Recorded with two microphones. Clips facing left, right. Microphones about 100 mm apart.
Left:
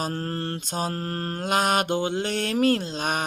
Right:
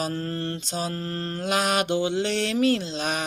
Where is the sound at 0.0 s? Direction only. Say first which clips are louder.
Even; 45° left (ahead or behind).